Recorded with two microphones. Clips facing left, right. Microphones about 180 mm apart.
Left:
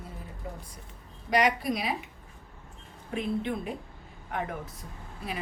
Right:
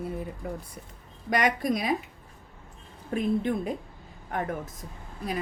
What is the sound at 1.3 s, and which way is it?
Speech, 45° right (ahead or behind).